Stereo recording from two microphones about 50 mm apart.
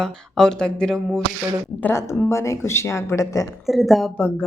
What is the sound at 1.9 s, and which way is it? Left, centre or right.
Speech, left.